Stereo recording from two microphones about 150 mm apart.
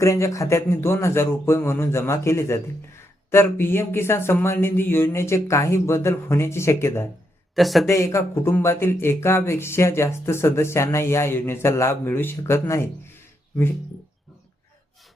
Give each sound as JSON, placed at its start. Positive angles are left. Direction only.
{"t": 0.0, "sound": "a man's voice", "side_deg": 20}
{"t": 7.5, "sound": "a man's voice", "side_deg": 0}
{"t": 7.9, "sound": "a man's voice", "side_deg": 20}